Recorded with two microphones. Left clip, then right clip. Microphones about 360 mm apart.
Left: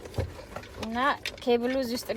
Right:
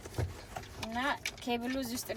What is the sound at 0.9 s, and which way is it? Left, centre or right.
A woman's voice, left.